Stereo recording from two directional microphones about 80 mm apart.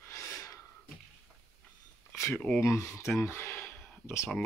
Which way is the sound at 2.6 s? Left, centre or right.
Left.